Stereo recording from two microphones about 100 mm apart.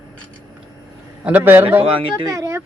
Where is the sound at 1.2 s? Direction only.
20° right (ahead or behind).